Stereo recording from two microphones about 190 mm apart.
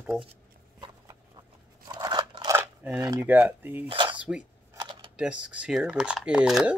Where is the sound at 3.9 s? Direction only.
25° right (ahead or behind).